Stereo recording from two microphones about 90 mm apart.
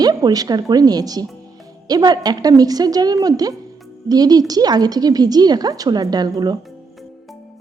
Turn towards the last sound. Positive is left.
turn(degrees=-50)  # may be behind; listen again after turning